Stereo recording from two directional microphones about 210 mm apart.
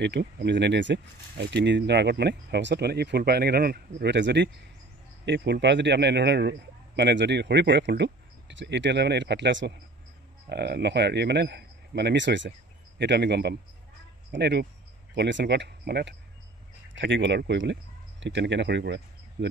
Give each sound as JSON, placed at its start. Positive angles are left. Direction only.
{"t": 0.0, "sound": "speech", "side_deg": -55}